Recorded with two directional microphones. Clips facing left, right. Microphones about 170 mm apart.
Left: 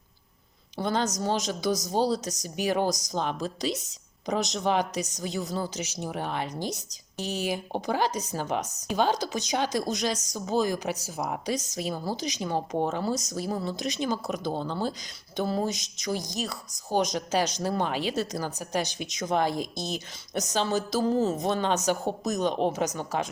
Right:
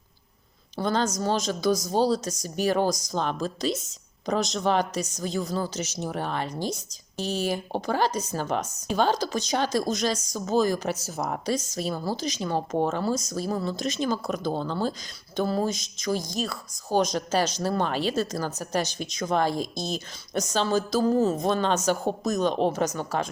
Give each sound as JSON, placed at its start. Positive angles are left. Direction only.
{"t": 0.8, "sound": "a woman's voice", "side_deg": 20}